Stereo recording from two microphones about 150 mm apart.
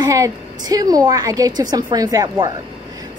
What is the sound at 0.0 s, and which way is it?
A woman's voice, 25° right (ahead or behind).